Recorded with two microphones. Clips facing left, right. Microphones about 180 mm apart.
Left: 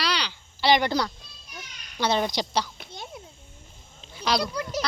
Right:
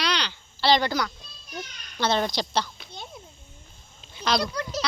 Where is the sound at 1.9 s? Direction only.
10° left (ahead or behind).